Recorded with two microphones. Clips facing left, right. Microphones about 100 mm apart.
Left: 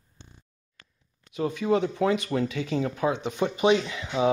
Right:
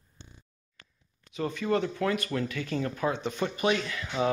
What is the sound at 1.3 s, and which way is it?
Speech, 10° left (ahead or behind).